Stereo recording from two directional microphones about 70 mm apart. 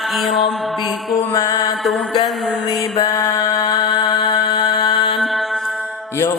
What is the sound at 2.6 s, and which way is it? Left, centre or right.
Mantra, left.